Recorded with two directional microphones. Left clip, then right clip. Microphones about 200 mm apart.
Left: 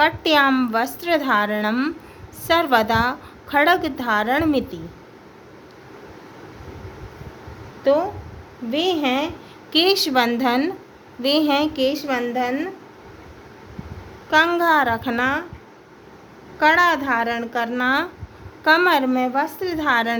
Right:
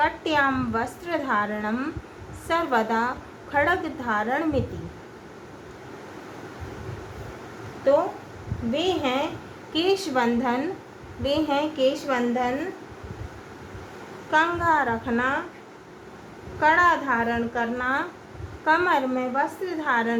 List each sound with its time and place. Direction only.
0.0 s a woman's voice: 55° left (ahead or behind)
7.9 s a woman's voice: 45° left (ahead or behind)
14.3 s a woman's voice: 55° left (ahead or behind)
16.6 s a woman's voice: 55° left (ahead or behind)